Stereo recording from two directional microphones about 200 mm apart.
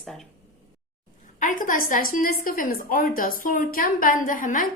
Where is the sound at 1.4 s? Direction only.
40° left (ahead or behind).